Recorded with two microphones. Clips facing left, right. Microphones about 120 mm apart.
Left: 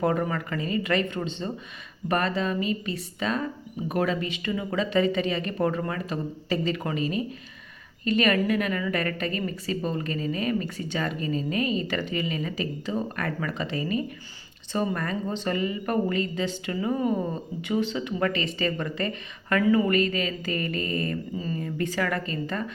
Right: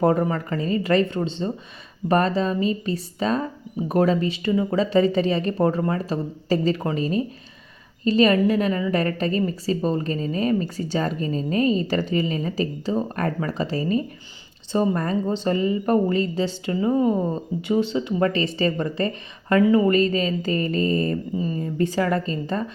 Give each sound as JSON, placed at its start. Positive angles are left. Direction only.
{"t": 0.0, "sound": "a woman's voice", "side_deg": -30}